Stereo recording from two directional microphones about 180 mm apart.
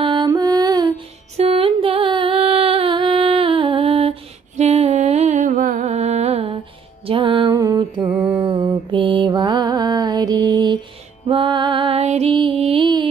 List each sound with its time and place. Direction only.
0.0 s music: 25° right (ahead or behind)
1.3 s music: 35° right (ahead or behind)
8.4 s mantra: 25° right (ahead or behind)
11.2 s music: 30° right (ahead or behind)